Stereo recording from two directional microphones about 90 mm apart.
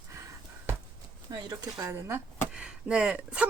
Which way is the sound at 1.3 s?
45° right (ahead or behind).